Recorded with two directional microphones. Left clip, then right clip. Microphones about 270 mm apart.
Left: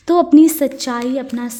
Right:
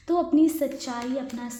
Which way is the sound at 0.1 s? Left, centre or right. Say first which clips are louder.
Left 11 dB; left.